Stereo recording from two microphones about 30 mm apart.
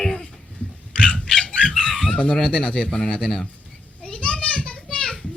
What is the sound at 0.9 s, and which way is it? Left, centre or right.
Dog, left.